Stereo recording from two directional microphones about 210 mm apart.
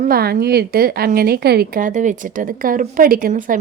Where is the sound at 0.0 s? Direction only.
45° right (ahead or behind).